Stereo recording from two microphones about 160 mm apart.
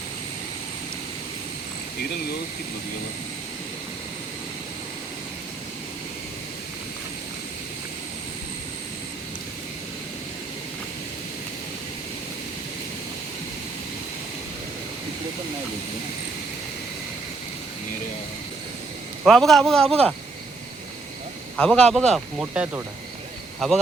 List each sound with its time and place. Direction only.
19.2 s speech: centre (ahead or behind)
21.5 s speech: centre (ahead or behind)